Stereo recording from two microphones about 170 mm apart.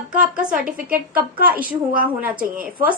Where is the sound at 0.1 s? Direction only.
5° right (ahead or behind).